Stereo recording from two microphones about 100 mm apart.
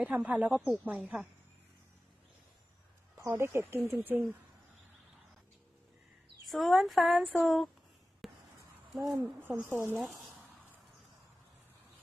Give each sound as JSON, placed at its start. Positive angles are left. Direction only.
{"t": 0.0, "sound": "speech", "side_deg": -15}
{"t": 3.2, "sound": "speech", "side_deg": -25}
{"t": 6.4, "sound": "speech", "side_deg": 0}
{"t": 8.2, "sound": "a sound", "side_deg": 0}
{"t": 9.6, "sound": "speech", "side_deg": -25}